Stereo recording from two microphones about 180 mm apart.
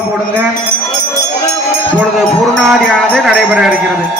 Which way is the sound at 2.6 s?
Centre (ahead or behind).